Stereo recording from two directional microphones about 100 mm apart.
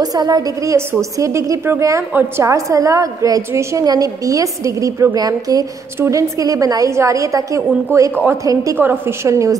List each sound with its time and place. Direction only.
0.0 s a woman's voice: 40° right (ahead or behind)
8.7 s a woman's voice: 20° right (ahead or behind)